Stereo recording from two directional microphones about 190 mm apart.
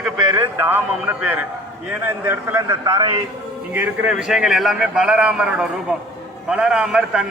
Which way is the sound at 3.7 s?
10° right (ahead or behind).